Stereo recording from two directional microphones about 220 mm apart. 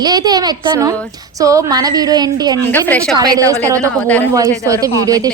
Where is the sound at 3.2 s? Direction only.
15° right (ahead or behind).